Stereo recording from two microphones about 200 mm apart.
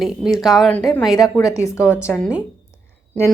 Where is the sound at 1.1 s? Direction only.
20° left (ahead or behind).